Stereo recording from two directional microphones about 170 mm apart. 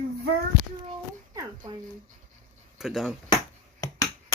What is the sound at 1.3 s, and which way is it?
Speech, 20° right (ahead or behind).